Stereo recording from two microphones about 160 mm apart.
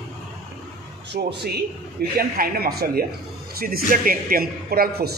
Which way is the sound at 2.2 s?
70° right (ahead or behind).